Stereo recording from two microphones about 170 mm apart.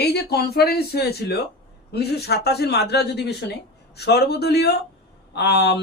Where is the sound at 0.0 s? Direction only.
70° left (ahead or behind).